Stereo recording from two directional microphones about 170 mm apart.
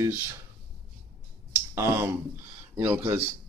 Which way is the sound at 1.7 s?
15° right (ahead or behind).